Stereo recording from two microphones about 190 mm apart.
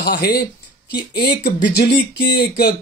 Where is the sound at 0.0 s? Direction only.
55° left (ahead or behind).